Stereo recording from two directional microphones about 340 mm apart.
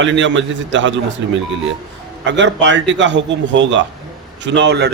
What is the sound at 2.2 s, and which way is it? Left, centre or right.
A man's voice, right.